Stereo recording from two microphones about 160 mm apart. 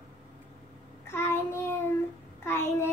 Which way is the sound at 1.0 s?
15° left (ahead or behind).